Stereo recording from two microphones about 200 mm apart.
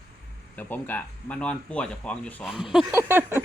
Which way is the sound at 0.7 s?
10° left (ahead or behind).